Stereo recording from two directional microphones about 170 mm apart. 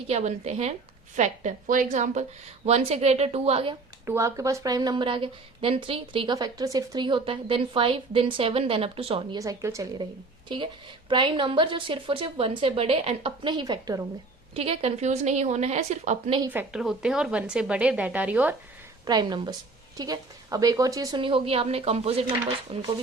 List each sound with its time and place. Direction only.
0.1 s a woman's voice: 40° right (ahead or behind)
4.0 s speech: 15° right (ahead or behind); by 9.4 s 30° right (ahead or behind)
9.4 s a woman's voice: 20° right (ahead or behind)
11.1 s a woman's voice: 30° right (ahead or behind)
14.5 s speech: 35° right (ahead or behind)
16.5 s speech: 5° right (ahead or behind)
19.0 s a woman's voice: 25° right (ahead or behind)
21.2 s speech: 30° right (ahead or behind)